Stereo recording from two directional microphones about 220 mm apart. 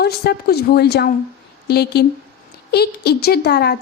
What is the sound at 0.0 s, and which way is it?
A woman's voice, 45° left (ahead or behind).